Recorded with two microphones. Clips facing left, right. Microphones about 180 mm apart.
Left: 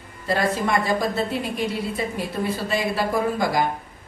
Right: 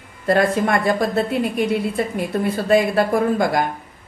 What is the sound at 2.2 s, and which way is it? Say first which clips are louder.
A woman's voice: right 4 dB; 55° right (ahead or behind).